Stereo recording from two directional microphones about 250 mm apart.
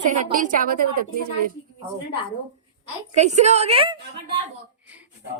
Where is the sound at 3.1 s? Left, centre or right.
Right.